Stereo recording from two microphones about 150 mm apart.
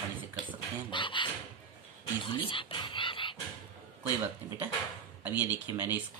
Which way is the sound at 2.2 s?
35° left (ahead or behind).